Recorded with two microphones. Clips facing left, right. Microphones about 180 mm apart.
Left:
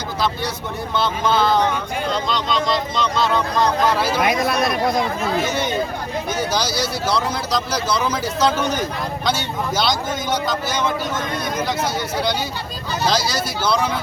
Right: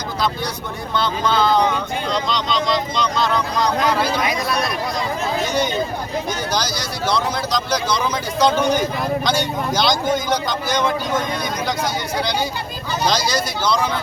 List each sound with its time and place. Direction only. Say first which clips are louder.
0.9 s speech: even; 5° left (ahead or behind)
4.2 s speech: left 3 dB; 55° left (ahead or behind)
5.5 s speech: right 1 dB; 5° left (ahead or behind)